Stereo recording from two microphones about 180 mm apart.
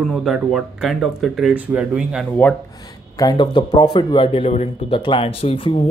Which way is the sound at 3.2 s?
25° left (ahead or behind).